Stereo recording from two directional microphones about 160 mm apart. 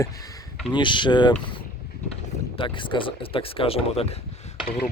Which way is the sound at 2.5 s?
30° left (ahead or behind).